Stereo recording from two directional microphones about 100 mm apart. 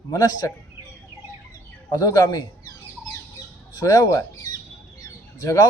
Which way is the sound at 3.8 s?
40° left (ahead or behind).